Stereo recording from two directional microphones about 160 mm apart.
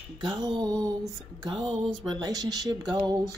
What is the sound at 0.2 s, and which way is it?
Speech, 25° right (ahead or behind).